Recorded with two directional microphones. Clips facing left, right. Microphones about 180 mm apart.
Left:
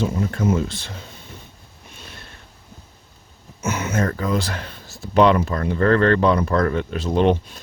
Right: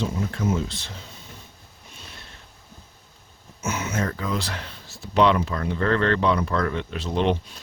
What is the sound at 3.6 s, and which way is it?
Speech, 55° left (ahead or behind).